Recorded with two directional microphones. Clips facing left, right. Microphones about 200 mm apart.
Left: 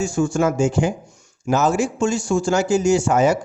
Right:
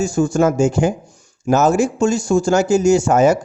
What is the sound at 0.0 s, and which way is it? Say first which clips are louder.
A man's voice: right 3 dB; 40° right (ahead or behind).